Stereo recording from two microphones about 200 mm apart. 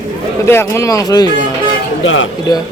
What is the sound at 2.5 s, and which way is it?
Speech, 20° left (ahead or behind).